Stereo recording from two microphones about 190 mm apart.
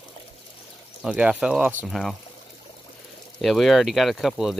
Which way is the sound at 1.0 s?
5° right (ahead or behind).